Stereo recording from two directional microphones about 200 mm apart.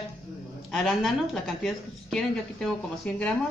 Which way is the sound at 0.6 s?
Centre (ahead or behind).